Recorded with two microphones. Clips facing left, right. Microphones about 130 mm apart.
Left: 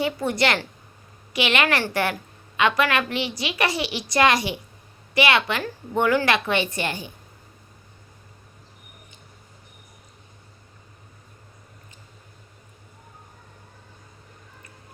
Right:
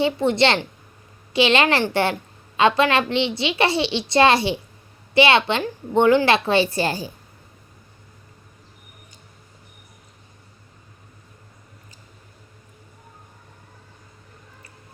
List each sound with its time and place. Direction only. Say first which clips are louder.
0.0 s a child's voice: right 5 dB; 25° right (ahead or behind)